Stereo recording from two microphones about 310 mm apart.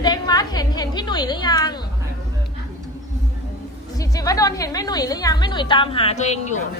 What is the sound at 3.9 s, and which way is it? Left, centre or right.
A woman's voice, centre.